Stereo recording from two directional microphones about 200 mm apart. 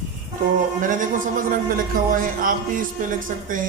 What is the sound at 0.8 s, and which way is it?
A man's voice, 40° right (ahead or behind).